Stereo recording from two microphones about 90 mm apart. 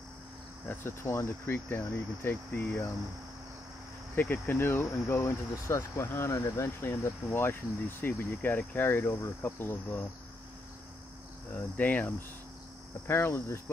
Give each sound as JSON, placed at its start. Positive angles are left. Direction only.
{"t": 0.7, "sound": "speech", "side_deg": 25}
{"t": 4.1, "sound": "speech", "side_deg": 20}
{"t": 11.5, "sound": "cricket", "side_deg": 20}
{"t": 13.0, "sound": "speech", "side_deg": 25}